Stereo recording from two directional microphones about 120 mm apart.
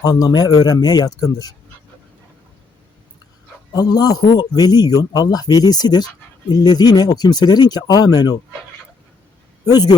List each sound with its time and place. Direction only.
0.0 s speech: 30° left (ahead or behind)
3.7 s speech: 35° left (ahead or behind)
9.6 s speech: 35° left (ahead or behind)